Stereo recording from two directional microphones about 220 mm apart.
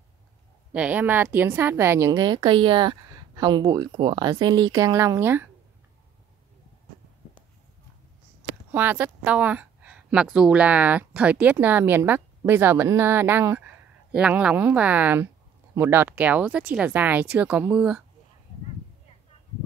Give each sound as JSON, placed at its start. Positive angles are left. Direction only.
{"t": 0.7, "sound": "a woman's voice", "side_deg": -5}
{"t": 8.7, "sound": "a woman's voice", "side_deg": -10}